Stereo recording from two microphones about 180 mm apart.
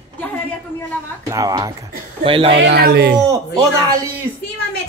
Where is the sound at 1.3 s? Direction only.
20° right (ahead or behind).